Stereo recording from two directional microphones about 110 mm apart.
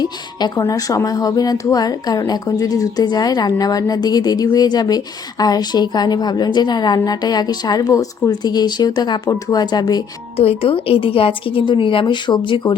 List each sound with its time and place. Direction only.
0.0 s a woman's voice: 40° left (ahead or behind)
10.3 s speech: 65° left (ahead or behind); by 12.7 s 45° left (ahead or behind)